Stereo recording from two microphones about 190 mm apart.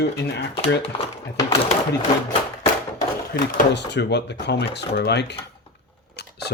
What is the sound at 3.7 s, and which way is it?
Speech, 65° left (ahead or behind).